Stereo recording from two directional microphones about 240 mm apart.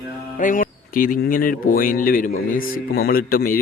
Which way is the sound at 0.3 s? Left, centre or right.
Left.